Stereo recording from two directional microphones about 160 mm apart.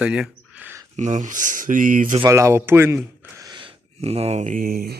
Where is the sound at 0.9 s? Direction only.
50° right (ahead or behind).